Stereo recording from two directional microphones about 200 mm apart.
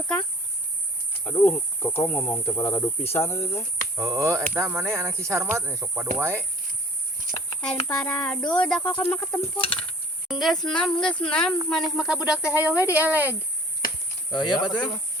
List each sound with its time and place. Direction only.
1.2 s speech: 10° left (ahead or behind)
3.9 s speech: 15° right (ahead or behind)
7.9 s speech: 5° left (ahead or behind)
9.6 s speech: 25° left (ahead or behind)
10.2 s speech: centre (ahead or behind)
13.8 s cricket: 45° left (ahead or behind)
14.3 s speech: 20° left (ahead or behind)